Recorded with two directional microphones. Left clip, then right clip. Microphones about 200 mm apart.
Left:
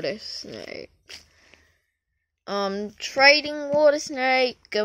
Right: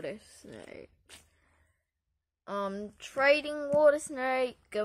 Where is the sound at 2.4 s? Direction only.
20° left (ahead or behind).